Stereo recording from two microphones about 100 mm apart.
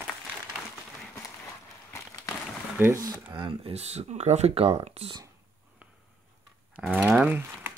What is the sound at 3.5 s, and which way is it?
Speech, 80° right.